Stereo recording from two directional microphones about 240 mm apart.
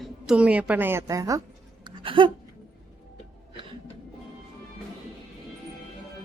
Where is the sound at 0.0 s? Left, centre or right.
Centre.